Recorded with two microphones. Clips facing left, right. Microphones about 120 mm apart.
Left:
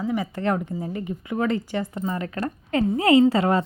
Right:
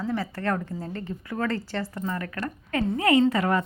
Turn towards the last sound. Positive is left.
turn(degrees=25)  # may be behind; listen again after turning